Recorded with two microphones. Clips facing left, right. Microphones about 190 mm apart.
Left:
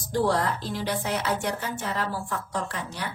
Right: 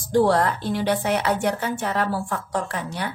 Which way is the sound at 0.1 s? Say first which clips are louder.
Right 6 dB; 60° right (ahead or behind).